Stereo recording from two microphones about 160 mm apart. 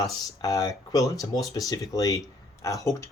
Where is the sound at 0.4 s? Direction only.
20° left (ahead or behind).